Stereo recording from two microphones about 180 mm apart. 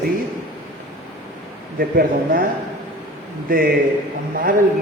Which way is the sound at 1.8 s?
55° right (ahead or behind).